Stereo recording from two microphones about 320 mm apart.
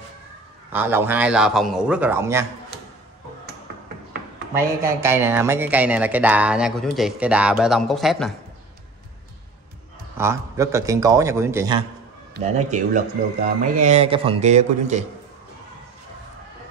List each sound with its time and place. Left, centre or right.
0.7 s speech: centre
4.6 s speech: centre
10.1 s a man's voice: centre
12.4 s speech: right